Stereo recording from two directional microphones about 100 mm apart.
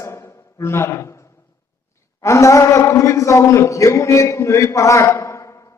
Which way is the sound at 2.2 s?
30° left (ahead or behind).